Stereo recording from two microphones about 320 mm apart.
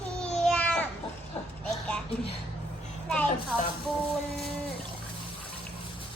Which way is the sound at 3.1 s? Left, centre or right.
Centre.